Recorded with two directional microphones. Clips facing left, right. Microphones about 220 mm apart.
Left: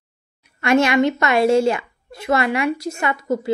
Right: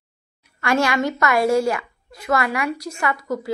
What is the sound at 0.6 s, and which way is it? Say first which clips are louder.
A woman's voice: left 4 dB; 20° left (ahead or behind).